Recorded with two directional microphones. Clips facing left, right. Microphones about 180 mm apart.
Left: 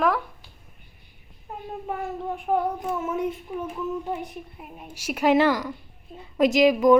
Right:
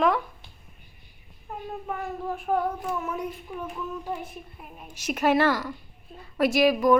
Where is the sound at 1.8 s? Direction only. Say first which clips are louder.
Left 3 dB; 25° left (ahead or behind).